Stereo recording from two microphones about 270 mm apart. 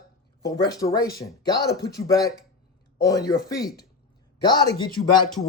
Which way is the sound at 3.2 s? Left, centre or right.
Left.